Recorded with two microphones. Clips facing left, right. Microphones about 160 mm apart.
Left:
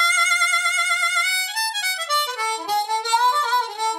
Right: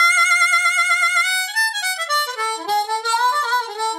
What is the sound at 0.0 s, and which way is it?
Music, 10° left (ahead or behind).